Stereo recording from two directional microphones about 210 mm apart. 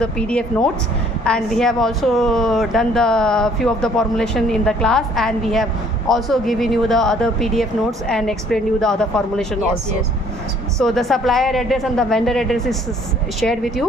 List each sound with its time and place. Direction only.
0.0 s a woman's voice: 5° left (ahead or behind)
10.8 s a woman's voice: centre (ahead or behind)